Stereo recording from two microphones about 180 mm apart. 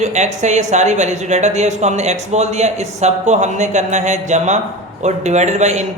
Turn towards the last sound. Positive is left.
turn(degrees=-40)  # may be behind; listen again after turning